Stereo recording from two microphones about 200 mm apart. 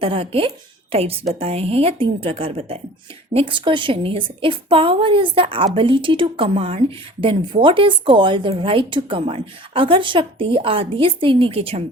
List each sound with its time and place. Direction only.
0.0 s a woman's voice: 30° right (ahead or behind)